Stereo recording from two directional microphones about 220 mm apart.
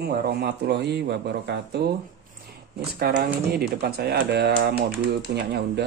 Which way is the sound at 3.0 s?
35° right (ahead or behind).